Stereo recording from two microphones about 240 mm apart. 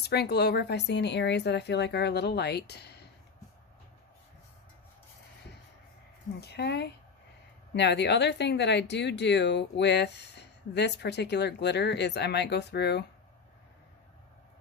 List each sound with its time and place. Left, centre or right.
0.0 s speech: left
6.4 s speech: left